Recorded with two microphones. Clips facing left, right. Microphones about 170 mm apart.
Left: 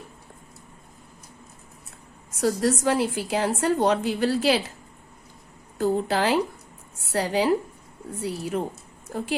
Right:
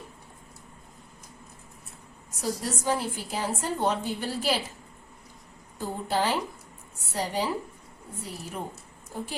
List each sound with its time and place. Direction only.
2.4 s a woman's voice: 85° left
5.7 s a woman's voice: 90° left
8.2 s a woman's voice: 90° left